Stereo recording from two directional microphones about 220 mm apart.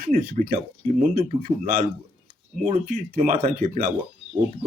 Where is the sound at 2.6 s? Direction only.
40° right (ahead or behind).